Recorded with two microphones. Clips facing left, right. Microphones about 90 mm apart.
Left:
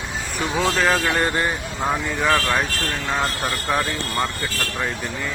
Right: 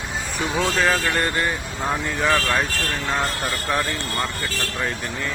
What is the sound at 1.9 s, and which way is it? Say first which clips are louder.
Speech: left 1 dB; 5° left (ahead or behind).